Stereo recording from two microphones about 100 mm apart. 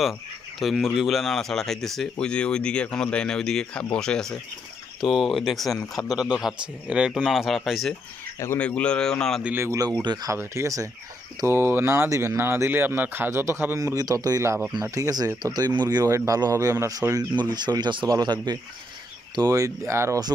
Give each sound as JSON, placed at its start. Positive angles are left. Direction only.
{"t": 0.6, "sound": "a man's voice", "side_deg": 0}
{"t": 8.5, "sound": "speech", "side_deg": 10}
{"t": 9.4, "sound": "speech", "side_deg": -15}
{"t": 9.7, "sound": "speech", "side_deg": -35}
{"t": 10.3, "sound": "speech", "side_deg": -30}
{"t": 13.7, "sound": "speech", "side_deg": -35}
{"t": 16.1, "sound": "speech", "side_deg": -30}
{"t": 17.0, "sound": "speech", "side_deg": -20}
{"t": 17.5, "sound": "speech", "side_deg": -45}